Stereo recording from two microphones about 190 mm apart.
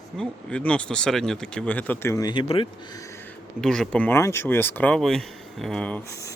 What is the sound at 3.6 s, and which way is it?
Speech, 5° left (ahead or behind).